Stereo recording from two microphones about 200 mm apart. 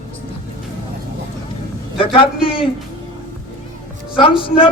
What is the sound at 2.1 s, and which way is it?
Speech, 25° left (ahead or behind).